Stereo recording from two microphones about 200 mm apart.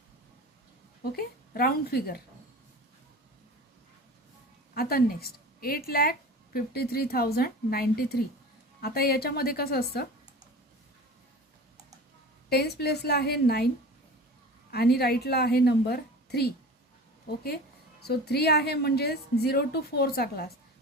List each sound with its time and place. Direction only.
1.1 s a woman's voice: 50° left (ahead or behind)
4.7 s a woman's voice: 50° left (ahead or behind)
12.5 s a woman's voice: 55° left (ahead or behind)
14.7 s a woman's voice: 50° left (ahead or behind)